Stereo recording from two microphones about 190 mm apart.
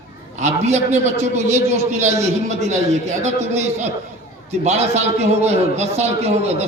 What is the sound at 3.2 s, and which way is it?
A man's voice, 35° right (ahead or behind).